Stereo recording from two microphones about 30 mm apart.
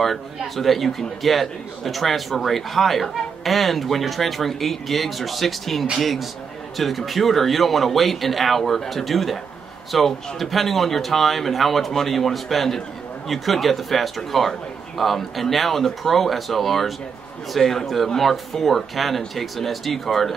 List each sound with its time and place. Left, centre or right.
0.6 s a man's voice: centre
17.8 s a man's voice: centre